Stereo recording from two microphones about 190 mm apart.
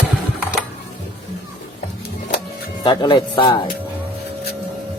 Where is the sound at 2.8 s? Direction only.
25° left (ahead or behind).